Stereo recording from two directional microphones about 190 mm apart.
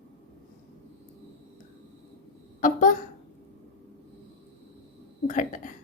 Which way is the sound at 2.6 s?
45° left (ahead or behind).